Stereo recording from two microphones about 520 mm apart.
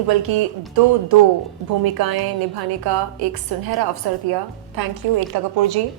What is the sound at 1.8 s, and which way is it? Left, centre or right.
A woman's voice, right.